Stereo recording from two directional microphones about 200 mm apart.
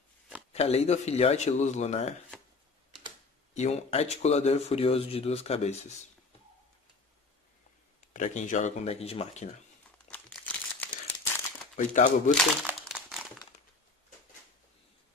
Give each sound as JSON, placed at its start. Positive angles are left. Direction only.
{"t": 0.5, "sound": "speech", "side_deg": 30}
{"t": 3.5, "sound": "speech", "side_deg": 35}
{"t": 8.1, "sound": "speech", "side_deg": 40}
{"t": 10.0, "sound": "crumpling", "side_deg": 5}
{"t": 11.7, "sound": "speech", "side_deg": 40}
{"t": 12.6, "sound": "crumpling", "side_deg": 0}